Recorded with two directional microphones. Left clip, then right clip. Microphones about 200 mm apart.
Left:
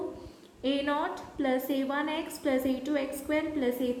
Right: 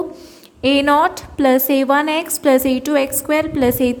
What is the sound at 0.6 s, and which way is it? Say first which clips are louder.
A woman's voice: right 16 dB; 55° right (ahead or behind).